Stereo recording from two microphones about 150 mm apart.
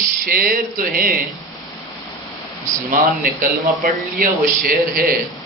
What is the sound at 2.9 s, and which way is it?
Speech, 65° right (ahead or behind).